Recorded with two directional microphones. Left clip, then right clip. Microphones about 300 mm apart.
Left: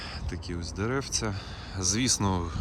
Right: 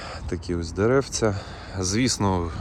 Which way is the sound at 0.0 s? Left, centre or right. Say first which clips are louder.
Right 6 dB; centre.